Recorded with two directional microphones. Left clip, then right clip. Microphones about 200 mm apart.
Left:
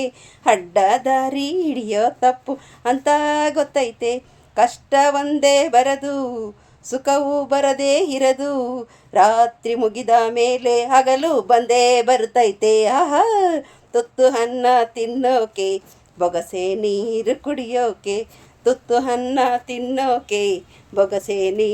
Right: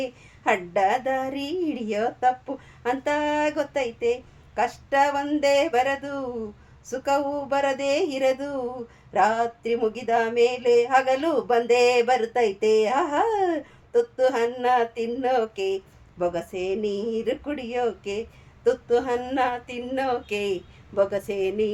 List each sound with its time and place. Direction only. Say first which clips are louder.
0.0 s speech: left 7 dB; 45° left (ahead or behind)